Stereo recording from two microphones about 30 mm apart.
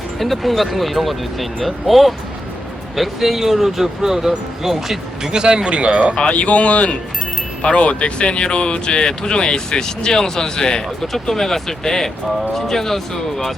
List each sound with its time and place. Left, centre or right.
0.2 s speech: centre
5.2 s speech: right
6.3 s speech: left
11.0 s speech: centre